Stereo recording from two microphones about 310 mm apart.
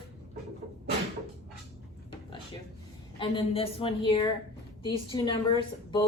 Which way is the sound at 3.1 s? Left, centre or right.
Centre.